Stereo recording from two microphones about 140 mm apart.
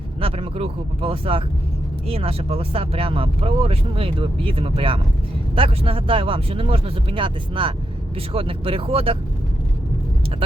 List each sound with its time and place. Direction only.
0.2 s speech: 40° right (ahead or behind)